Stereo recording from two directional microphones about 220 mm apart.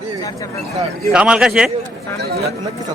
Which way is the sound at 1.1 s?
5° right (ahead or behind).